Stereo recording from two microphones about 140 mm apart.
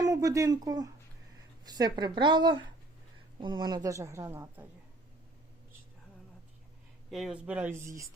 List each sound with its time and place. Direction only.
0.0 s a woman's voice: 25° right (ahead or behind)
7.1 s speech: centre (ahead or behind); by 8.0 s 20° right (ahead or behind)